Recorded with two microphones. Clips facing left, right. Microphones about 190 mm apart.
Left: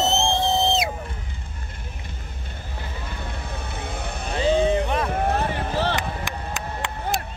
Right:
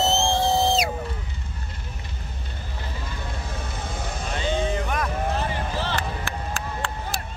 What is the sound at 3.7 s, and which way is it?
Vehicle, 60° left (ahead or behind).